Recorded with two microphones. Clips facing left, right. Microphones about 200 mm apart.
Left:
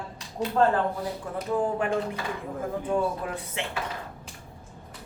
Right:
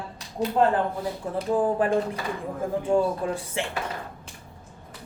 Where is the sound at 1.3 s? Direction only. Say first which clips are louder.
Right 4 dB; 30° right (ahead or behind).